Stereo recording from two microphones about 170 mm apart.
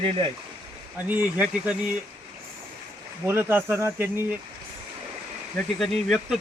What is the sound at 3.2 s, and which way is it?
Speech, 15° right (ahead or behind).